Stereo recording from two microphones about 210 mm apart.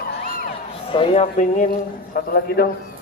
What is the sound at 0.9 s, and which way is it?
Speech, 30° left (ahead or behind).